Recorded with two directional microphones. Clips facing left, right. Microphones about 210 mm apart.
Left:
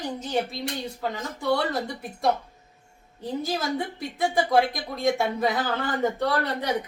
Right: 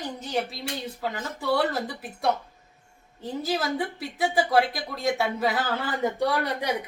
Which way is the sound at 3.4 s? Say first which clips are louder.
Right 2 dB; 5° right (ahead or behind).